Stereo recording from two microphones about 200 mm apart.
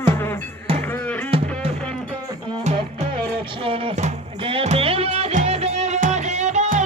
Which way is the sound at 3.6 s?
25° right (ahead or behind).